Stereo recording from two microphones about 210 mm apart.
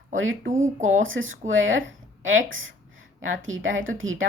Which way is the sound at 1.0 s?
70° right (ahead or behind).